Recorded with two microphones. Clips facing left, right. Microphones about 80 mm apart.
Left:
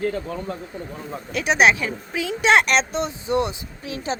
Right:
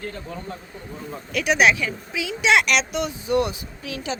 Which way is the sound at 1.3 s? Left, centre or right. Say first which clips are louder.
Left 1 dB; left.